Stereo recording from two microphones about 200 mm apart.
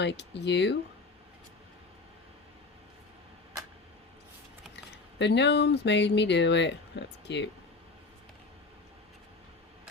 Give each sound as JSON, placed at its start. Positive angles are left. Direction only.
{"t": 0.0, "sound": "speech", "side_deg": 60}
{"t": 5.2, "sound": "speech", "side_deg": 60}